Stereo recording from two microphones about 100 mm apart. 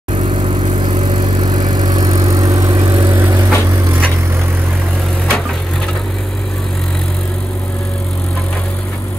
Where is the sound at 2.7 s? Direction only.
60° right (ahead or behind).